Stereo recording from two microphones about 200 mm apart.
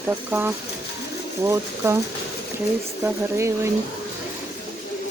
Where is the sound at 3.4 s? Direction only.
15° right (ahead or behind).